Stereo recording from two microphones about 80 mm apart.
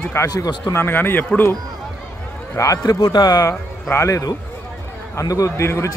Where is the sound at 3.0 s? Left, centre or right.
Left.